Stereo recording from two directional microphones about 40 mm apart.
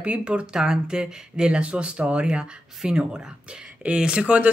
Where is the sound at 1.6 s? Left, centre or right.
Right.